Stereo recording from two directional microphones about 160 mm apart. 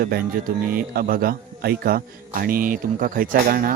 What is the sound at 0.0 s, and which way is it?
A man's voice, 65° right (ahead or behind).